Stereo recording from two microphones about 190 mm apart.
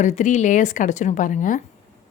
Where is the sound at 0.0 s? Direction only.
40° left (ahead or behind).